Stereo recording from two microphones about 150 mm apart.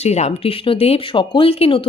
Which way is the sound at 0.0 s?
45° left (ahead or behind).